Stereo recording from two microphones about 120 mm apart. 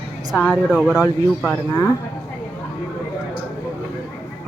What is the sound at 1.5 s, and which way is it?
Speech, 20° left (ahead or behind).